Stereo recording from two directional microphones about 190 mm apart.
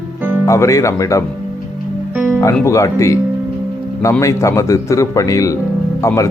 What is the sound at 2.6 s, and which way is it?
Speech, 15° left (ahead or behind).